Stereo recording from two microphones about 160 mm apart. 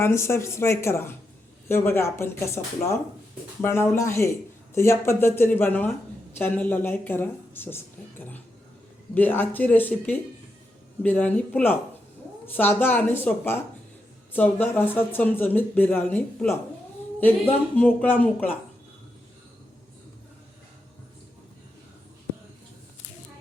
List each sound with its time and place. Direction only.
0.0 s speech: 15° left (ahead or behind)
9.1 s speech: 10° left (ahead or behind)
17.7 s speech: 10° left (ahead or behind)